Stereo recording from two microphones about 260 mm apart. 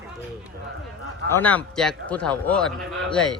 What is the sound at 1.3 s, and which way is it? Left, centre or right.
A man's voice, centre.